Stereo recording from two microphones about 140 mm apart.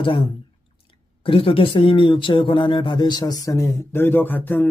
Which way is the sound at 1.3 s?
40° left (ahead or behind).